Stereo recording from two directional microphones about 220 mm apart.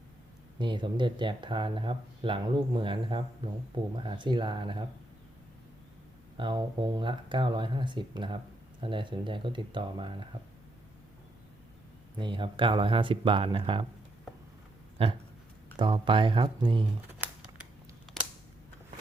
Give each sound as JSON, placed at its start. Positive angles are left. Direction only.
{"t": 0.6, "sound": "speech", "side_deg": -20}
{"t": 6.3, "sound": "speech", "side_deg": -20}
{"t": 12.2, "sound": "speech", "side_deg": -20}
{"t": 15.0, "sound": "speech", "side_deg": -25}